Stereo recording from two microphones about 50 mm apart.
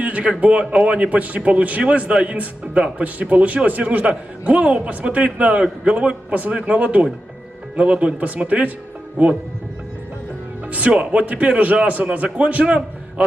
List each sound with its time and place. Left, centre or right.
0.0 s a man's voice: right
10.7 s a man's voice: right